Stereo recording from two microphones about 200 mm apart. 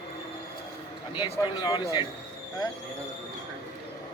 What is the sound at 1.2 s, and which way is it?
Speech, 25° left (ahead or behind).